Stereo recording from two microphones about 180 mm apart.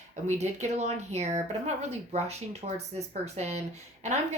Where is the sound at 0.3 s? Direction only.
40° right (ahead or behind).